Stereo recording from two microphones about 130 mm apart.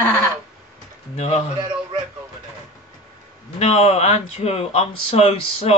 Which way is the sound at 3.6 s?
55° left (ahead or behind).